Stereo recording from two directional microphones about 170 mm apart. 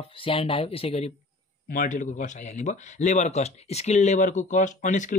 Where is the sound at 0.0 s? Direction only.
30° left (ahead or behind).